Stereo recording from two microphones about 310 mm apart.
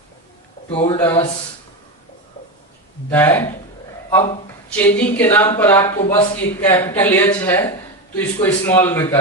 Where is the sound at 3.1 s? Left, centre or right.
Centre.